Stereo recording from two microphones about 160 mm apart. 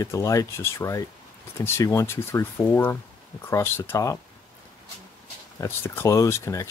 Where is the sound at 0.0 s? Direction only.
20° left (ahead or behind).